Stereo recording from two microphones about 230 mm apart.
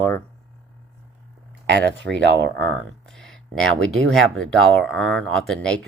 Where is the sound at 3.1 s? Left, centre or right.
Centre.